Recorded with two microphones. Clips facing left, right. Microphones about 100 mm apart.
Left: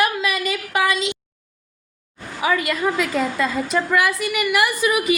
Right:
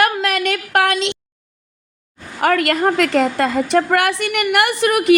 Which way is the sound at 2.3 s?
65° right (ahead or behind).